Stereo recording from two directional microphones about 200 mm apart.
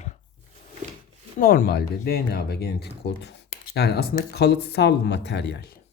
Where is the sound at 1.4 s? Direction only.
50° left (ahead or behind).